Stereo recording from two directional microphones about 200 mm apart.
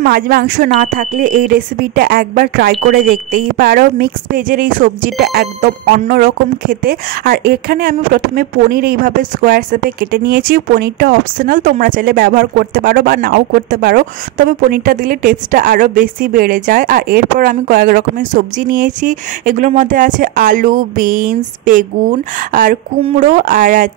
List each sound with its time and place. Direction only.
0.0 s speech: 50° right (ahead or behind)